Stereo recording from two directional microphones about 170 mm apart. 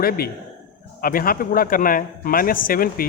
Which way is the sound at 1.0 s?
55° left (ahead or behind).